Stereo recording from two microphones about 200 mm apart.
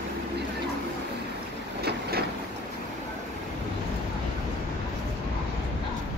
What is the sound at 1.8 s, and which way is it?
Vehicle, 50° right (ahead or behind).